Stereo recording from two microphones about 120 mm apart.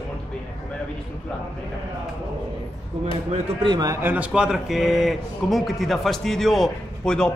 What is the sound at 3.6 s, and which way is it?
Speech, 40° right (ahead or behind).